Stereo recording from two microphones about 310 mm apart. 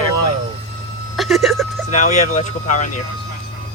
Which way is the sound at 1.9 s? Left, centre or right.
Left.